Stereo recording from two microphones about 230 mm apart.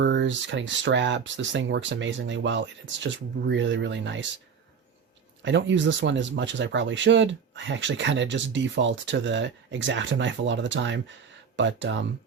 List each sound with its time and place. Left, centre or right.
0.0 s speech: right
5.4 s speech: right